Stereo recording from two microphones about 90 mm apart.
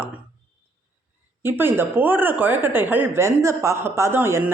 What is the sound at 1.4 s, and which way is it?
Speech, 25° right (ahead or behind).